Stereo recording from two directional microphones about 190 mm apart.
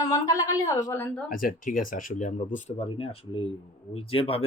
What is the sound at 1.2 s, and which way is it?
Speech, 45° left (ahead or behind).